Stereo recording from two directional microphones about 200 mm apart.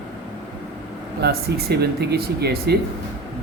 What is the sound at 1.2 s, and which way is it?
Speech, 50° right (ahead or behind).